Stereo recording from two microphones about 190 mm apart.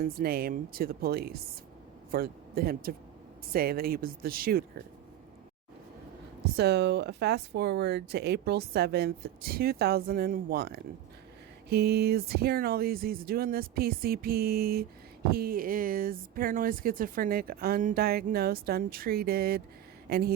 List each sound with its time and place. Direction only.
0.0 s speech: 55° right (ahead or behind)
6.4 s speech: 60° right (ahead or behind)